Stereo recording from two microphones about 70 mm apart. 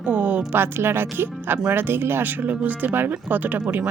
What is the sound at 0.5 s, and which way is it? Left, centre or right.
Speech, right.